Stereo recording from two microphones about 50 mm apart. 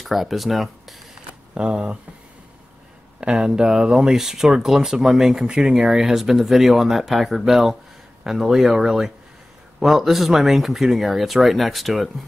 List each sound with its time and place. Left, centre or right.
0.0 s speech: centre
1.5 s speech: centre
3.2 s speech: centre